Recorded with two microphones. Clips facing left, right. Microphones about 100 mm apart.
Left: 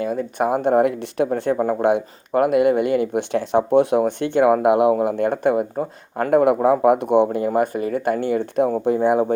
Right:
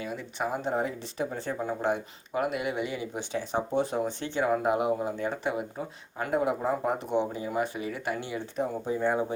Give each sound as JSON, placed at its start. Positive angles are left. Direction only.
{"t": 0.0, "sound": "speech", "side_deg": 45}
{"t": 0.4, "sound": "speech", "side_deg": 60}